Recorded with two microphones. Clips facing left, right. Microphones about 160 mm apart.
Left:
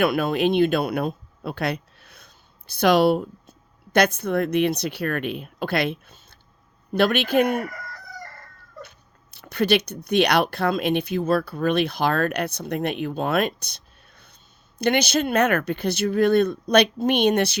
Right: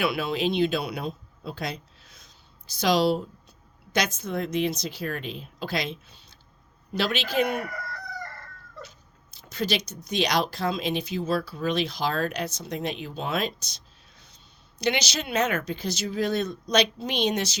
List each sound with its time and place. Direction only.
0.0 s speech: 50° left (ahead or behind)
8.8 s speech: 60° left (ahead or behind)